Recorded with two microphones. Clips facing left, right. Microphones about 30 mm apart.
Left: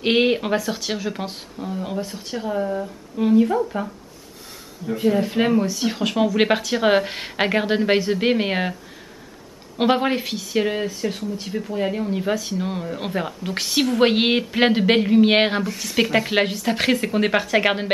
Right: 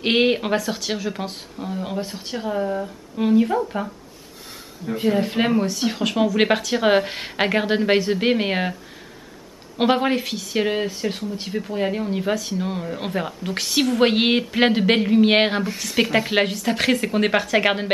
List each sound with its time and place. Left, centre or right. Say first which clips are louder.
0.0 s speech: even; centre
1.6 s speech: even; centre
9.8 s speech: even; centre
10.6 s speech: right 1 dB; centre